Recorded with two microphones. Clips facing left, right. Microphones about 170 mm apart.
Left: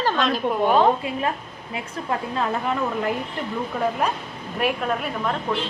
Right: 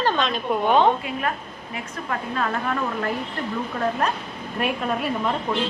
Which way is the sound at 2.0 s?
20° left (ahead or behind).